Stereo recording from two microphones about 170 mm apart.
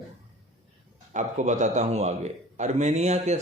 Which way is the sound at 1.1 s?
45° right (ahead or behind).